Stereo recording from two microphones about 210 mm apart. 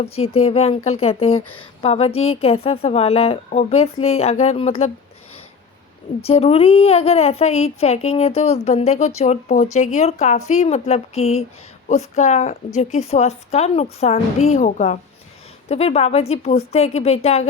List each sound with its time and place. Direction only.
0.0 s speech: 30° left (ahead or behind)
6.2 s a woman's voice: 30° left (ahead or behind)